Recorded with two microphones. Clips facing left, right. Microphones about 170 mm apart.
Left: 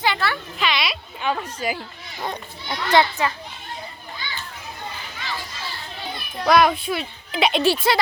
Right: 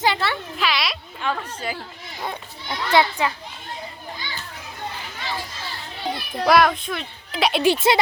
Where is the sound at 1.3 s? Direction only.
10° left (ahead or behind).